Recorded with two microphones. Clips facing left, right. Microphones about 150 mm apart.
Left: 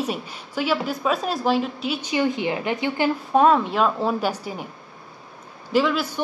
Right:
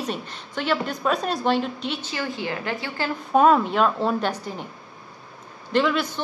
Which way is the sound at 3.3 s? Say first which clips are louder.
Right 1 dB; centre (ahead or behind).